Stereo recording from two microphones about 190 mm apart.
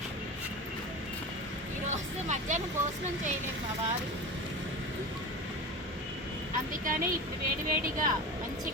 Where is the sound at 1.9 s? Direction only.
40° right (ahead or behind).